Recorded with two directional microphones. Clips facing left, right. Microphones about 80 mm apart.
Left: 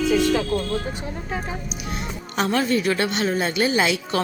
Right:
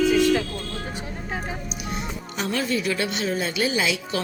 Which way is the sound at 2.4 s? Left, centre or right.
Left.